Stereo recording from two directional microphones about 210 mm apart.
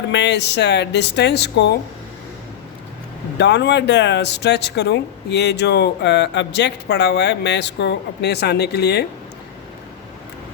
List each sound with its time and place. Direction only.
0.1 s speech: 55° left (ahead or behind)
3.3 s speech: 55° left (ahead or behind)